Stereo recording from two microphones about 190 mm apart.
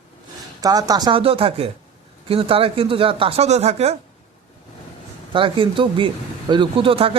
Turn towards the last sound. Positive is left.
turn(degrees=-30)  # may be behind; listen again after turning